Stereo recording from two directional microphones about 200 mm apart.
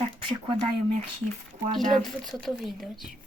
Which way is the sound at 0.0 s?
25° right (ahead or behind).